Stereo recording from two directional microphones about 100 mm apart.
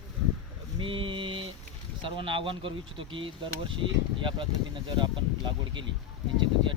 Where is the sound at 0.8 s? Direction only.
60° right (ahead or behind).